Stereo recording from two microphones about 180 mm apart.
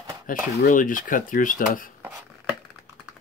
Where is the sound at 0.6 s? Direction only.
50° left (ahead or behind).